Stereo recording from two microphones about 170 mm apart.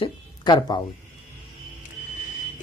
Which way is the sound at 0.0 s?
25° left (ahead or behind).